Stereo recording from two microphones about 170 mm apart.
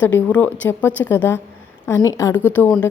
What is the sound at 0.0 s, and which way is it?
A woman's voice, 10° left (ahead or behind).